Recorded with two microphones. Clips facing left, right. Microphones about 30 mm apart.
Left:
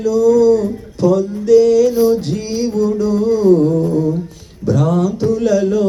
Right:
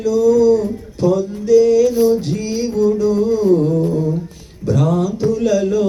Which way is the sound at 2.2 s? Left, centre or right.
Left.